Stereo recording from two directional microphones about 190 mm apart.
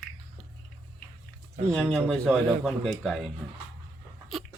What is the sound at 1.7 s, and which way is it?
Speech, centre (ahead or behind).